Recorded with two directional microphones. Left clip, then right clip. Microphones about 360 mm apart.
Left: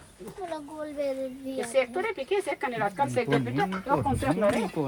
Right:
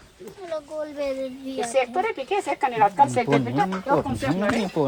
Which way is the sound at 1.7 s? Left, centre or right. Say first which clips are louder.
Right 4 dB; centre.